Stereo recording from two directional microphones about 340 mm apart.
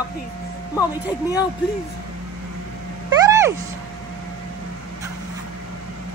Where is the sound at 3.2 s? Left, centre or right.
Centre.